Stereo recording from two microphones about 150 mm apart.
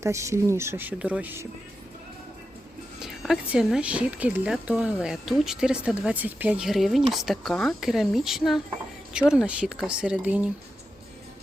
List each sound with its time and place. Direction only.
0.0 s speech: 20° right (ahead or behind)
3.0 s speech: 5° right (ahead or behind)